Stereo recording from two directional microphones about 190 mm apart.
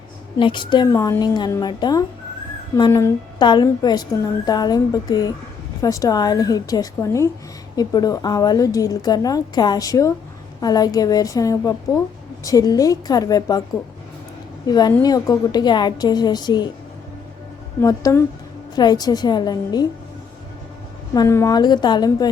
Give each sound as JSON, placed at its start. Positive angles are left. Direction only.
{"t": 0.3, "sound": "a woman's voice", "side_deg": 25}
{"t": 14.7, "sound": "a woman's voice", "side_deg": 20}
{"t": 17.7, "sound": "a woman's voice", "side_deg": 15}
{"t": 21.1, "sound": "a woman's voice", "side_deg": 15}